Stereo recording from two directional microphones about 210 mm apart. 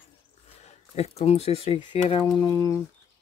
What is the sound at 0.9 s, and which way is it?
Speech, 30° left (ahead or behind).